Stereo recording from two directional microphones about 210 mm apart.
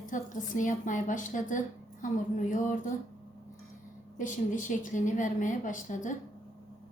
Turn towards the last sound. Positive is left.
turn(degrees=40)  # may be behind; listen again after turning